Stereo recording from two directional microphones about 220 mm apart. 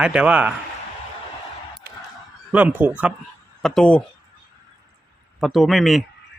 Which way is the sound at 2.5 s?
10° right (ahead or behind).